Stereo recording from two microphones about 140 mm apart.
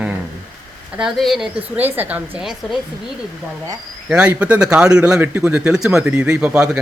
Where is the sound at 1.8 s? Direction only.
15° right (ahead or behind).